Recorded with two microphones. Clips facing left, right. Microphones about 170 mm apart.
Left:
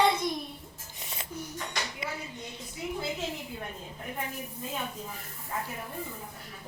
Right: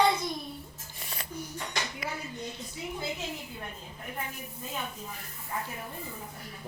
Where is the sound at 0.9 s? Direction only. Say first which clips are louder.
Even; 20° left (ahead or behind).